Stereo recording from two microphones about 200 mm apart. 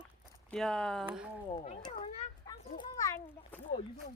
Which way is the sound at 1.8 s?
25° left (ahead or behind).